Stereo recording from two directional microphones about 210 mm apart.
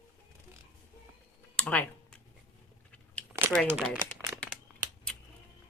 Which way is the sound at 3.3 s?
15° right (ahead or behind).